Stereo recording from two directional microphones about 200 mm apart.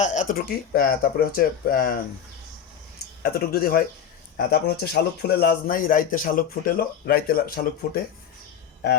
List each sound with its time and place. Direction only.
0.0 s speech: 40° left (ahead or behind)
3.3 s speech: 50° left (ahead or behind)